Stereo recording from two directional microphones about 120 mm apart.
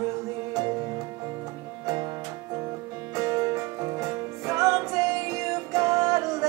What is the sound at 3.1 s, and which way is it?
Music, 25° right (ahead or behind).